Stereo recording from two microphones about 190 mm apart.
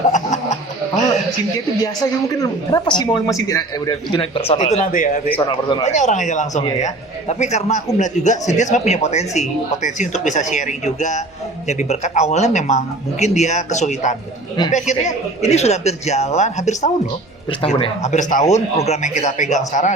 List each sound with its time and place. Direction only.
0.1 s chicken: 40° left (ahead or behind)
2.4 s a woman's voice: 20° left (ahead or behind); by 5.2 s 40° left (ahead or behind)
5.5 s a woman's voice: 25° left (ahead or behind)
5.8 s speech: 40° left (ahead or behind)